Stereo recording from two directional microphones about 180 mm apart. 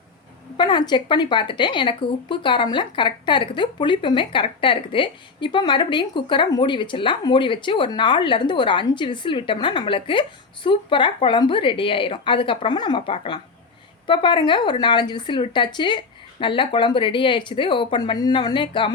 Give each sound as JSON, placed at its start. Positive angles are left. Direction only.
{"t": 0.5, "sound": "a woman's voice", "side_deg": 25}